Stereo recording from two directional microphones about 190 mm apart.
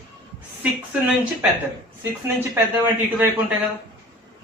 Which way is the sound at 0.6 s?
5° right (ahead or behind).